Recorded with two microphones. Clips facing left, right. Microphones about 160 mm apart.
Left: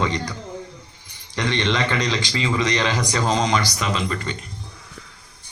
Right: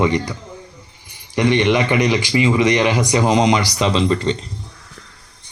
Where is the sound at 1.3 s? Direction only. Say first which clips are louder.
Right 7 dB; 15° right (ahead or behind).